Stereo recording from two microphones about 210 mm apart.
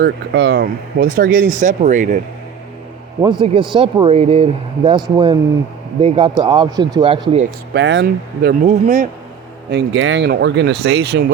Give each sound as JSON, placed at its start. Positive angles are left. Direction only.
{"t": 0.0, "sound": "speech", "side_deg": -55}
{"t": 3.2, "sound": "speech", "side_deg": -20}
{"t": 7.7, "sound": "speech", "side_deg": -55}
{"t": 8.6, "sound": "speech", "side_deg": -40}
{"t": 9.6, "sound": "speech", "side_deg": -60}